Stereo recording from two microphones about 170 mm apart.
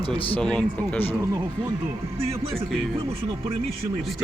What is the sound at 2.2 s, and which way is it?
Speech, 35° right (ahead or behind).